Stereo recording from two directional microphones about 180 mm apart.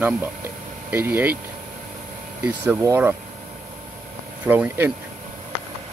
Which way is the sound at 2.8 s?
15° right (ahead or behind).